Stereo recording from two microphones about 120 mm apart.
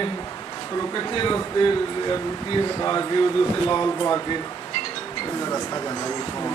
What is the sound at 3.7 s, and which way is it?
Speech, 30° left (ahead or behind).